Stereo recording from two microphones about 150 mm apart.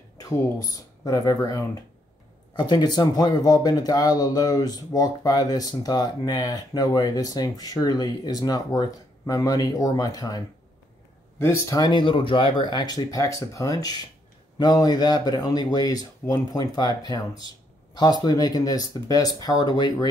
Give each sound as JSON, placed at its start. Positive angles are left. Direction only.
{"t": 0.2, "sound": "speech", "side_deg": 25}